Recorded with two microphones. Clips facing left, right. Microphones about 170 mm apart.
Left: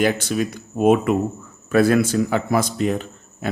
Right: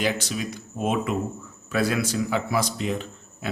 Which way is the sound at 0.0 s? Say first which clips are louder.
Left 7 dB; 55° left (ahead or behind).